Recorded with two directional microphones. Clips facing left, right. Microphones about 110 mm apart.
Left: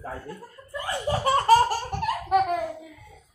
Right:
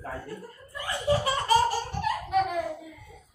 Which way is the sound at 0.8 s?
50° left (ahead or behind).